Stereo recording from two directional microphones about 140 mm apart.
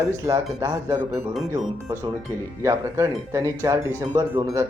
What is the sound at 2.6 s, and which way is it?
Speech, 20° right (ahead or behind).